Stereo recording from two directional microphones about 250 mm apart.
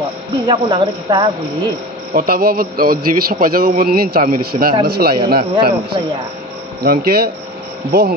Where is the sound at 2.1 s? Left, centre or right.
Right.